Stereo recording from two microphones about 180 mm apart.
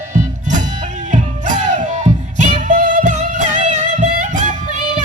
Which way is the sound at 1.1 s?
40° right (ahead or behind).